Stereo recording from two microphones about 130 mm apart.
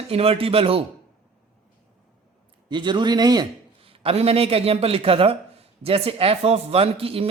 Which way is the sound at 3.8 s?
45° right (ahead or behind).